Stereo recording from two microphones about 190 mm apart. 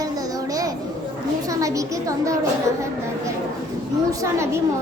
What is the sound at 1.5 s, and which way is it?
Speech, 15° right (ahead or behind).